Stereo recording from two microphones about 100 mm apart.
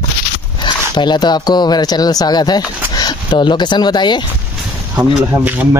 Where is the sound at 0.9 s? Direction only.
50° left (ahead or behind).